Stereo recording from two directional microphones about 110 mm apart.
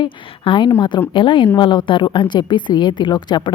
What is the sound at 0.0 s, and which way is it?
Speech, 45° left (ahead or behind).